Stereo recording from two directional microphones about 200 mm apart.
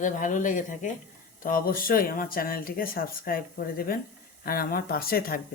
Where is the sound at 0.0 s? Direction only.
40° left (ahead or behind).